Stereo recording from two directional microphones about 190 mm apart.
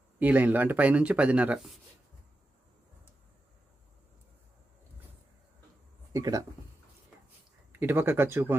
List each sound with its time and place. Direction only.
0.2 s speech: 10° right (ahead or behind)
6.1 s speech: 20° right (ahead or behind)
7.7 s speech: 10° right (ahead or behind)